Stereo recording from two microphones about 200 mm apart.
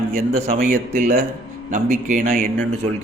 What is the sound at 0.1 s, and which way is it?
A man's voice, 40° right (ahead or behind).